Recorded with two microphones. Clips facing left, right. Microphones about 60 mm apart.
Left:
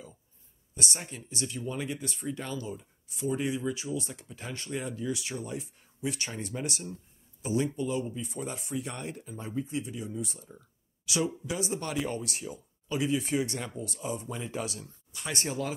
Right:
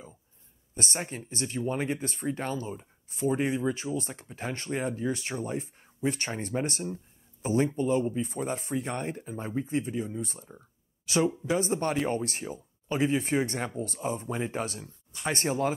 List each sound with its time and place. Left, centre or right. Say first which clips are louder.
0.7 s speech: right 3 dB; right